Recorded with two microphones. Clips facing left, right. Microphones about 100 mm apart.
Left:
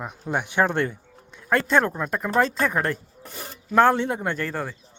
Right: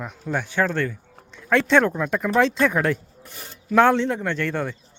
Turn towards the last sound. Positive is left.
turn(degrees=5)  # may be behind; listen again after turning